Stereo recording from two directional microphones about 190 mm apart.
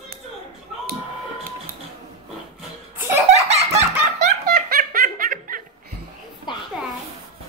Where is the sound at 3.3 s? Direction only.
35° right (ahead or behind).